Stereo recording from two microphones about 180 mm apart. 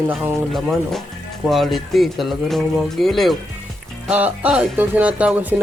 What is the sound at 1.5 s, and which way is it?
Speech, centre (ahead or behind).